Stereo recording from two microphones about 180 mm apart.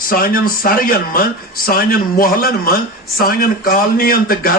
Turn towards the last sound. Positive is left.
turn(degrees=55)  # may be behind; listen again after turning